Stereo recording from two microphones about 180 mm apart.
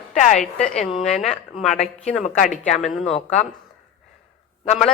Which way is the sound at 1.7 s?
40° left (ahead or behind).